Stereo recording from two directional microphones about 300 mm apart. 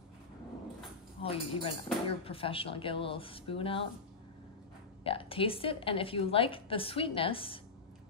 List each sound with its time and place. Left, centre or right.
1.2 s speech: centre
5.0 s speech: centre